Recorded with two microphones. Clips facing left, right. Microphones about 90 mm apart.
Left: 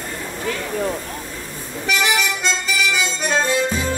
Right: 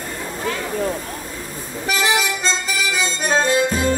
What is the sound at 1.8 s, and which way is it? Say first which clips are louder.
Music: right 1 dB; 30° right (ahead or behind).